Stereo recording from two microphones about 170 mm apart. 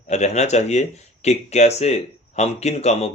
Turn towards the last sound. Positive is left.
turn(degrees=40)  # may be behind; listen again after turning